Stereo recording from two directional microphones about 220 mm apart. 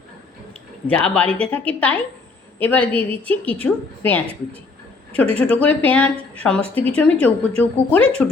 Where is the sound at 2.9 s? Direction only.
25° right (ahead or behind).